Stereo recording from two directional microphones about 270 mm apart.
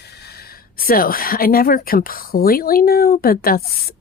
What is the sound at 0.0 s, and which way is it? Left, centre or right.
Speech, left.